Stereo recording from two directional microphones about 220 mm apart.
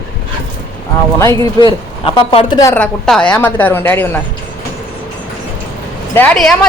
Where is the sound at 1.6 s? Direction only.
25° left (ahead or behind).